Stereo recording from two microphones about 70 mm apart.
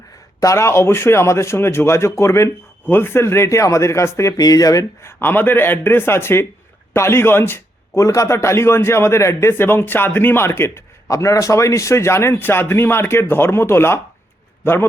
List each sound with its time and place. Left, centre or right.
0.3 s a man's voice: left
2.8 s a man's voice: left
4.4 s speech: left
5.2 s a man's voice: left
7.9 s a man's voice: left
11.1 s a man's voice: left